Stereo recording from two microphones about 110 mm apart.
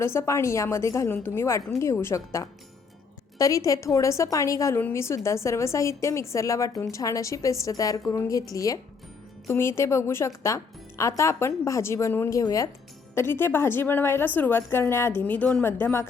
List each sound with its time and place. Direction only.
0.0 s a woman's voice: 25° left (ahead or behind)
13.1 s a woman's voice: 20° left (ahead or behind)